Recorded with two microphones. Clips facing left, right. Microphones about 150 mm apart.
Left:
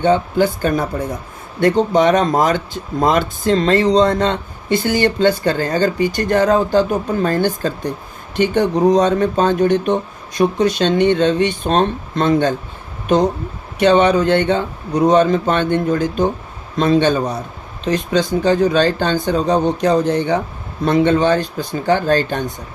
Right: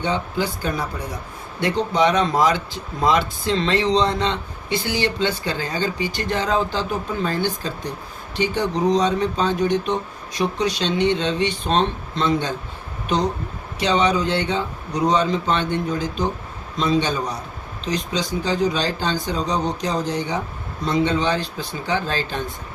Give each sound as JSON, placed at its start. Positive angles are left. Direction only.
{"t": 0.0, "sound": "speech", "side_deg": 50}
{"t": 13.7, "sound": "speech", "side_deg": 55}